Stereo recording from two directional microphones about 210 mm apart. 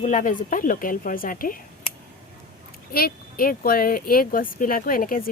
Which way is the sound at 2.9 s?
45° left (ahead or behind).